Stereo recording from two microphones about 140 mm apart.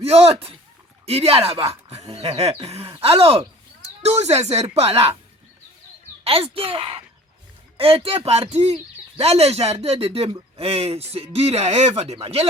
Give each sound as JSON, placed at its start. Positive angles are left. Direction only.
{"t": 0.0, "sound": "speech", "side_deg": -45}
{"t": 6.2, "sound": "speech", "side_deg": -45}